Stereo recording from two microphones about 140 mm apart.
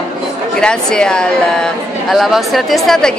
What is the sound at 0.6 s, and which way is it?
A woman's voice, 5° left (ahead or behind).